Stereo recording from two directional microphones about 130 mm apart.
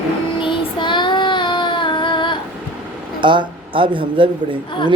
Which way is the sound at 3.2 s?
40° right (ahead or behind).